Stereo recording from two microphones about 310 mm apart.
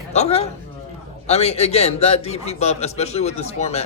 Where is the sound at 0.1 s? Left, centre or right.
Centre.